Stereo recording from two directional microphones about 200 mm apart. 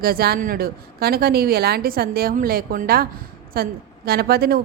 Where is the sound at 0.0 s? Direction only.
50° right (ahead or behind).